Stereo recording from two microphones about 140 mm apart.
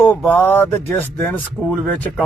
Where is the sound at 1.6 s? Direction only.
5° right (ahead or behind).